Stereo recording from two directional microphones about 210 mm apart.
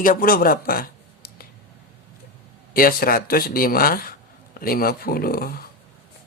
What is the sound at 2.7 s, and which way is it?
Speech, 45° left (ahead or behind).